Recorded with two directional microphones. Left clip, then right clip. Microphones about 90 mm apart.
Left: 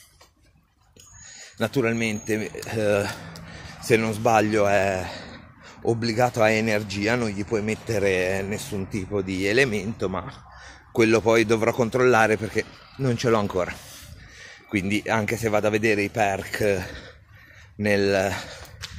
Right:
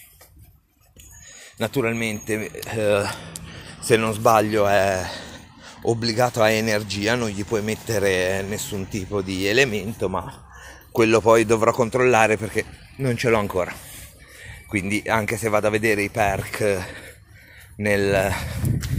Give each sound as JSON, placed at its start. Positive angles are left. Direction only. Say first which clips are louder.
{"t": 1.7, "sound": "speech", "louder": "right 1 dB", "side_deg": 35}
{"t": 4.6, "sound": "speech", "louder": "right 2 dB", "side_deg": 10}
{"t": 13.0, "sound": "speech", "louder": "right 2 dB", "side_deg": 30}
{"t": 14.8, "sound": "speech", "louder": "right 2 dB", "side_deg": 20}